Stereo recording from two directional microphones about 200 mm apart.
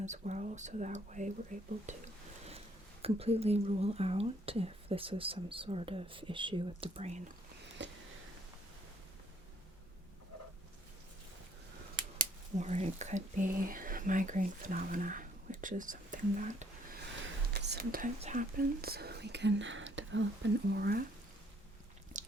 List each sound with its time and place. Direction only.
0.0 s speech: 35° right (ahead or behind)
3.0 s speech: 30° right (ahead or behind)
7.8 s a sound: 60° right (ahead or behind)
12.1 s speech: 40° right (ahead or behind)
17.5 s whispering: 55° right (ahead or behind)
18.2 s speech: 40° right (ahead or behind); by 20.2 s 70° right (ahead or behind)
20.7 s speech: 50° right (ahead or behind)
22.1 s biting: 40° right (ahead or behind)